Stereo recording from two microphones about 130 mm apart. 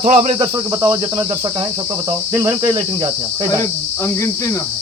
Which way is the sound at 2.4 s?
25° right (ahead or behind).